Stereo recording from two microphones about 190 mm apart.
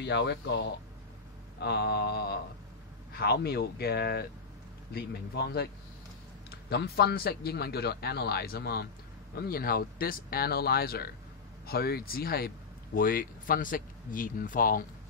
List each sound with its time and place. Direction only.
0.0 s a man's voice: 65° left (ahead or behind); by 14.9 s 45° left (ahead or behind)